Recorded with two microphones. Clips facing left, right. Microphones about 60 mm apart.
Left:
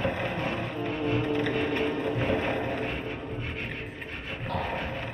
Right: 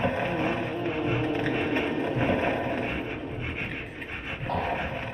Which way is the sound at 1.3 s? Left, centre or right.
Right.